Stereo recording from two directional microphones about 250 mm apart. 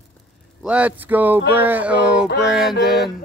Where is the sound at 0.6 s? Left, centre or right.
Centre.